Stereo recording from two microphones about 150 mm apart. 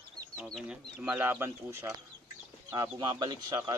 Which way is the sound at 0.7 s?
10° right (ahead or behind).